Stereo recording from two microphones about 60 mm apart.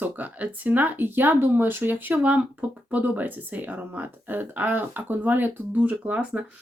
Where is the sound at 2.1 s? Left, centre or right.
Right.